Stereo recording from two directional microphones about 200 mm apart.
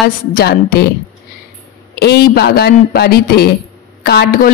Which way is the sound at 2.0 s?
55° left (ahead or behind).